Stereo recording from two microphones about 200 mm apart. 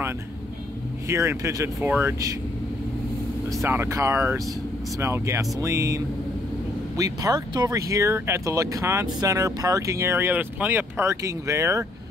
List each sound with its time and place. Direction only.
1.0 s speech: 15° right (ahead or behind)
3.6 s speech: 10° right (ahead or behind)